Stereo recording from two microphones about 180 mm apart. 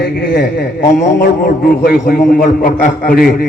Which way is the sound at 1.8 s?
55° left (ahead or behind).